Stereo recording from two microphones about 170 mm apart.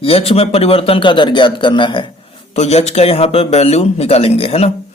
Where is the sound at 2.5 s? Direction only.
40° left (ahead or behind).